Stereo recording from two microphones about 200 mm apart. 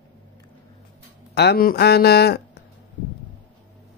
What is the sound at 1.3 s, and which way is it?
Speech, 55° left (ahead or behind).